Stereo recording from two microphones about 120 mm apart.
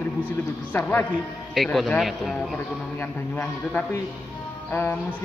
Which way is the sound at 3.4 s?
10° left (ahead or behind).